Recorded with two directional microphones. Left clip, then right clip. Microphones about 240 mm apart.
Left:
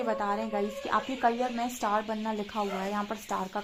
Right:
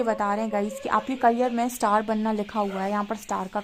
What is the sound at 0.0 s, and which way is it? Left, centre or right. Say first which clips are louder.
Speech: right 5 dB; right.